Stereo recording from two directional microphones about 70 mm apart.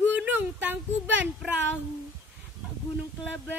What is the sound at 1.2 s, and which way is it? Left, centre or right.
Child singing, right.